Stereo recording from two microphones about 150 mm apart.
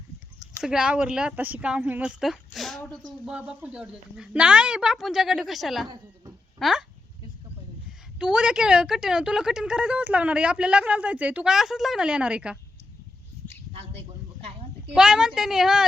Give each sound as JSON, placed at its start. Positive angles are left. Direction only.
{"t": 0.6, "sound": "speech", "side_deg": -5}
{"t": 8.2, "sound": "a woman's voice", "side_deg": -5}
{"t": 14.9, "sound": "speech", "side_deg": -5}